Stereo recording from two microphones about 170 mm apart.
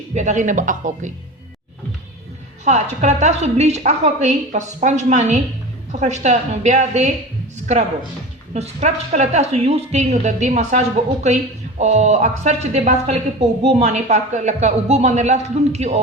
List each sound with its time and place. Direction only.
0.1 s a woman's voice: 45° right (ahead or behind)
2.6 s a woman's voice: 45° right (ahead or behind)
8.5 s a woman's voice: 40° right (ahead or behind)